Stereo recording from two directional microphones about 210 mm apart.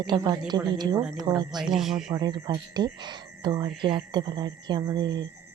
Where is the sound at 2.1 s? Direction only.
20° right (ahead or behind).